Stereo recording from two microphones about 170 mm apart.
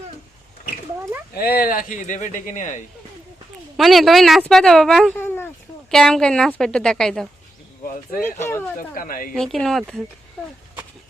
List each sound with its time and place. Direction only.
1.4 s speech: 60° left (ahead or behind); by 2.8 s 45° left (ahead or behind)
3.8 s speech: centre (ahead or behind)
5.1 s a sound: 10° left (ahead or behind)
5.9 s speech: 5° left (ahead or behind)
8.2 s speech: 15° left (ahead or behind)
9.0 s a woman's voice: 55° left (ahead or behind)
9.3 s speech: 5° left (ahead or behind)